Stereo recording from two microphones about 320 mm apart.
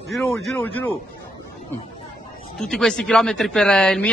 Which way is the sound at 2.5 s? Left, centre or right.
Centre.